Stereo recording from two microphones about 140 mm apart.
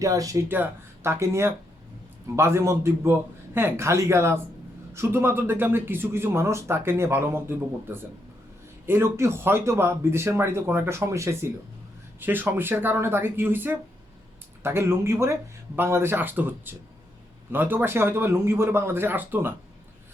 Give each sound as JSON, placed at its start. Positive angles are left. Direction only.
{"t": 0.0, "sound": "a man's voice", "side_deg": -25}